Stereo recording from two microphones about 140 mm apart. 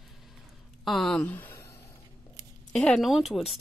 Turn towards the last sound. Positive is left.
turn(degrees=0)  # may be behind; listen again after turning